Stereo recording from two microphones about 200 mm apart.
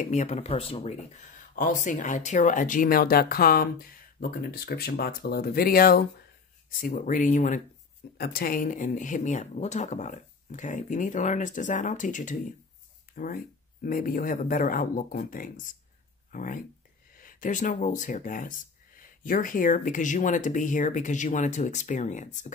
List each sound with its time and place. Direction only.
0.0 s speech: 35° left (ahead or behind)